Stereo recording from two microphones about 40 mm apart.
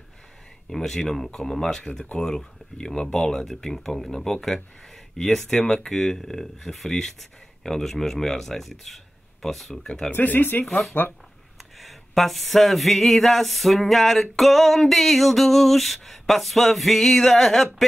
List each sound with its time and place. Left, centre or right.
0.7 s speech: centre
10.1 s speech: left
11.8 s a sound: centre